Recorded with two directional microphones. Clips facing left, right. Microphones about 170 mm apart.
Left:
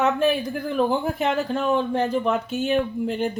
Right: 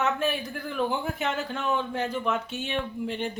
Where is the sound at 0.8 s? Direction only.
40° left (ahead or behind).